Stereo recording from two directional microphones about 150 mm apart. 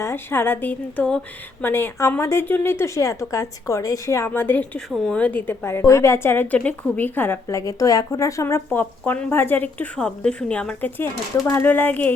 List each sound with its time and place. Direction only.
0.0 s a woman's voice: 15° left (ahead or behind)